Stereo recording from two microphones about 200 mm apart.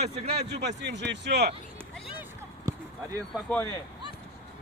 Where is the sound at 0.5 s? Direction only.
60° right (ahead or behind).